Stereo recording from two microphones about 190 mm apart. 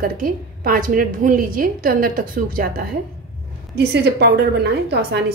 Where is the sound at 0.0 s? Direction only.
50° right (ahead or behind).